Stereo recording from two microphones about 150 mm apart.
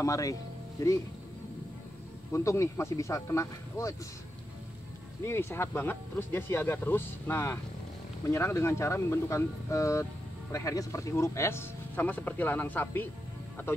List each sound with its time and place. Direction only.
0.0 s speech: 20° left (ahead or behind)
2.3 s speech: 20° left (ahead or behind)
5.2 s speech: 15° left (ahead or behind)